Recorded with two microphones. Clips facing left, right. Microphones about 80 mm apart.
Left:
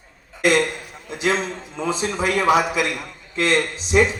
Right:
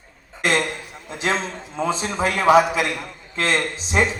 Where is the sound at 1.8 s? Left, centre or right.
Right.